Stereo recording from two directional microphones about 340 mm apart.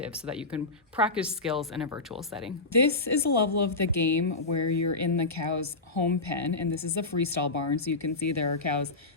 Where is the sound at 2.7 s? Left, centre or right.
Left.